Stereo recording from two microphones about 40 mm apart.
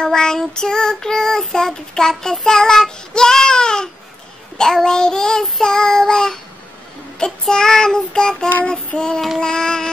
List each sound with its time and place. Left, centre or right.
0.0 s child singing: centre